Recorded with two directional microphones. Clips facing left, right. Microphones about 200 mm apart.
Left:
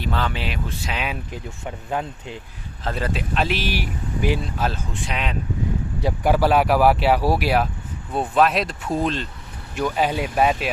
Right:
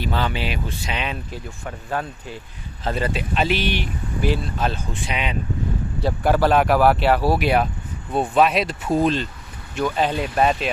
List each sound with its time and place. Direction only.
0.0 s speech: centre (ahead or behind)
1.3 s speech: 20° left (ahead or behind)
2.8 s speech: centre (ahead or behind)
4.2 s speech: 15° left (ahead or behind); by 5.4 s centre (ahead or behind)
6.0 s speech: 10° left (ahead or behind)
9.7 s speech: 10° left (ahead or behind)